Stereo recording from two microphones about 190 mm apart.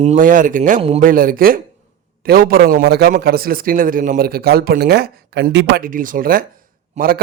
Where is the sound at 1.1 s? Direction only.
50° right (ahead or behind).